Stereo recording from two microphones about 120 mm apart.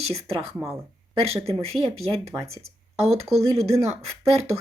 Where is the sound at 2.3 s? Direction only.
25° right (ahead or behind).